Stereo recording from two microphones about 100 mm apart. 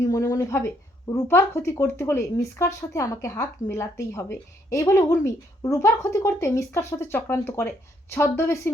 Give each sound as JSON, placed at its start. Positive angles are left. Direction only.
{"t": 0.0, "sound": "speech", "side_deg": 35}